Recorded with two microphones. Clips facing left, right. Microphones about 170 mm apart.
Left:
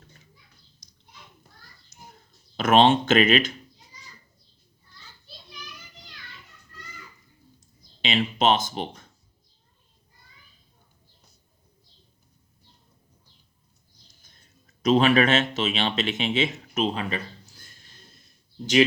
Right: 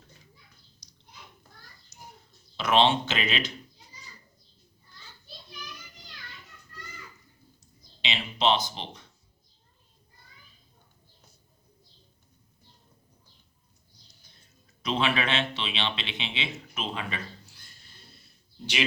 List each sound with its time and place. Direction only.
2.6 s speech: 50° left (ahead or behind)
7.6 s speech: 50° left (ahead or behind)
14.8 s speech: 45° left (ahead or behind)
17.5 s a sound: 45° left (ahead or behind)
18.6 s speech: 45° left (ahead or behind)